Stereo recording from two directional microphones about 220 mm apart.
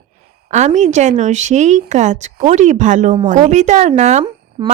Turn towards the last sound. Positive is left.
turn(degrees=-25)  # may be behind; listen again after turning